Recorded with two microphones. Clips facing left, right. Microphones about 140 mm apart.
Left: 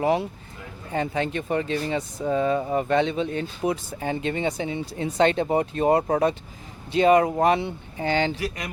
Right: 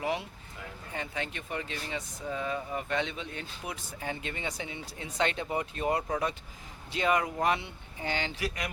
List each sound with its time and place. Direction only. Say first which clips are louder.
0.0 s speech: left 10 dB; 35° left (ahead or behind)
2.6 s speech: left 11 dB; 45° left (ahead or behind)
2.9 s speech: left 11 dB; 35° left (ahead or behind)
6.9 s speech: left 11 dB; 25° left (ahead or behind)